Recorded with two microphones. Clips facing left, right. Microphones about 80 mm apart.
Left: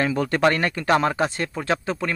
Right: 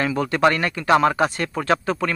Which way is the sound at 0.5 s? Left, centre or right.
Left.